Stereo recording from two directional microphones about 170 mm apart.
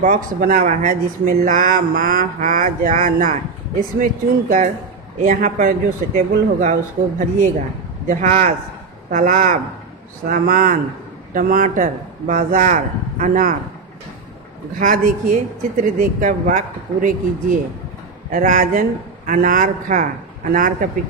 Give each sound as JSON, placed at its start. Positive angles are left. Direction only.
{"t": 0.0, "sound": "speech", "side_deg": -55}
{"t": 8.1, "sound": "speech", "side_deg": -50}
{"t": 14.8, "sound": "speech", "side_deg": -50}